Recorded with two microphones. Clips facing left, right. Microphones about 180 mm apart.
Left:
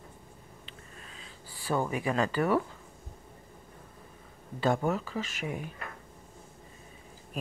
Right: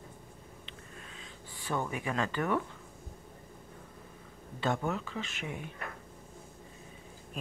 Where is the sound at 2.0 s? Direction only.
10° left (ahead or behind).